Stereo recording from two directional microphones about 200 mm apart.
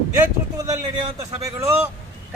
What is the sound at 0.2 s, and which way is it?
A man's voice, 15° right (ahead or behind).